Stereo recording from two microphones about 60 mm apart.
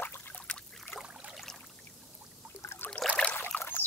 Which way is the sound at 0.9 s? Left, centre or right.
Left.